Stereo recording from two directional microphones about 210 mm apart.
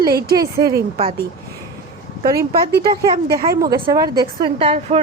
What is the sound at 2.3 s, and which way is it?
Speech, 45° right (ahead or behind).